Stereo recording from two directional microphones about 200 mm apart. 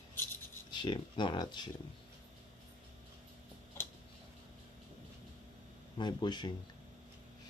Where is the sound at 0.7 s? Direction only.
20° left (ahead or behind).